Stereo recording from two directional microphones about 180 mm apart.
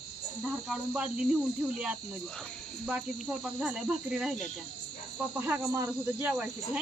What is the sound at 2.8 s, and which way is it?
Cricket, 5° right (ahead or behind).